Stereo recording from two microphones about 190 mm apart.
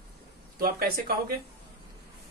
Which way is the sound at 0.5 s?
55° right (ahead or behind).